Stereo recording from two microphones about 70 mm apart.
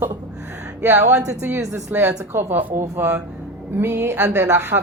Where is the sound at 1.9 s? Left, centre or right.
Right.